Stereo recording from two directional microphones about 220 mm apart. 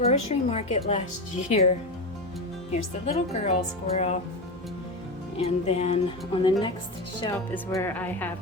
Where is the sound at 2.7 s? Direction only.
30° left (ahead or behind).